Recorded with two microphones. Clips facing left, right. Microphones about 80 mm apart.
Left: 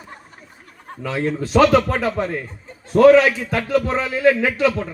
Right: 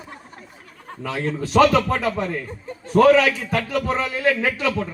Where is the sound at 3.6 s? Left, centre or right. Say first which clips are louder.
Left 3 dB; left.